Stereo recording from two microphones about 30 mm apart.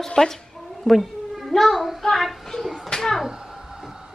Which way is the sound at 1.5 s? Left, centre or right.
Centre.